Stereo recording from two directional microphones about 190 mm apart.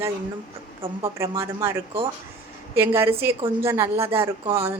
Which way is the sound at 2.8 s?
10° right (ahead or behind).